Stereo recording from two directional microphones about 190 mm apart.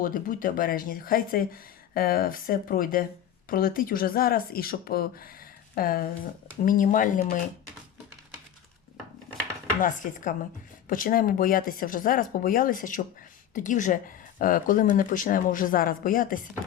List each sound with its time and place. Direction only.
0.0 s speech: 45° left (ahead or behind)
9.8 s speech: 45° left (ahead or behind)